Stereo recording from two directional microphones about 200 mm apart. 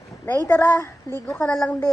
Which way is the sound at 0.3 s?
10° left (ahead or behind).